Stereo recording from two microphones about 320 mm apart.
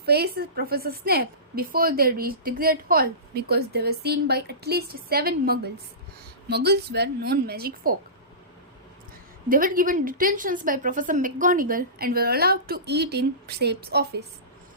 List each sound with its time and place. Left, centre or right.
0.0 s a woman's voice: right
9.5 s a woman's voice: right